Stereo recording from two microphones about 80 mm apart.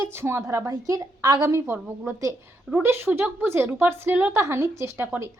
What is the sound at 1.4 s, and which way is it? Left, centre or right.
A woman's voice, right.